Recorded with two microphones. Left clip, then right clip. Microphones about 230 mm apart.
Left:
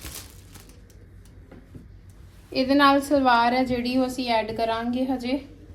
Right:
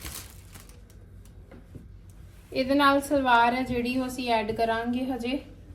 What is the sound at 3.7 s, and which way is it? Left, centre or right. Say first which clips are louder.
A woman's voice: left 4 dB; centre.